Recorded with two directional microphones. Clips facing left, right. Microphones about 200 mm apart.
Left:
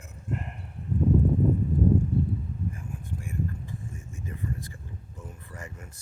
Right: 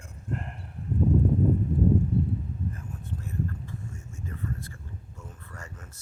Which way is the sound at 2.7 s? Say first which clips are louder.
Left 1 dB; 10° left (ahead or behind).